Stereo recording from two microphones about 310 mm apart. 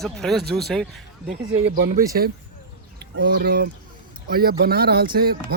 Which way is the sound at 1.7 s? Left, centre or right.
Right.